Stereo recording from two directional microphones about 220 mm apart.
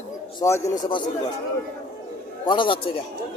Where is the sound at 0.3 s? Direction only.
15° left (ahead or behind).